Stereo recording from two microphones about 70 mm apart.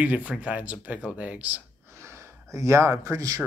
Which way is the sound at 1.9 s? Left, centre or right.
Right.